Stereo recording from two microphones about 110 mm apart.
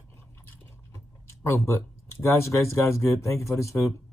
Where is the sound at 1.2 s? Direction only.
25° left (ahead or behind).